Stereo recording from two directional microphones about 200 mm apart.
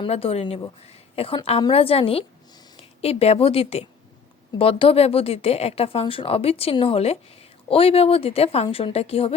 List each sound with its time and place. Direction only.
0.0 s speech: 30° left (ahead or behind)